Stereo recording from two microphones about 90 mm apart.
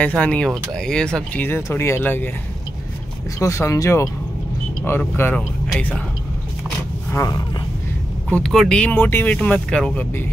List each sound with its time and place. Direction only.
0.0 s speech: 15° left (ahead or behind)
1.4 s speech: 20° left (ahead or behind)
3.3 s speech: 35° left (ahead or behind)
5.3 s speech: 15° left (ahead or behind)
8.3 s speech: 5° left (ahead or behind)
8.9 s speech: 20° left (ahead or behind)